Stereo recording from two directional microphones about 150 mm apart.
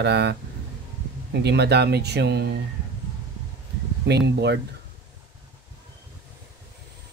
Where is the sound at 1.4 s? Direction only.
90° right.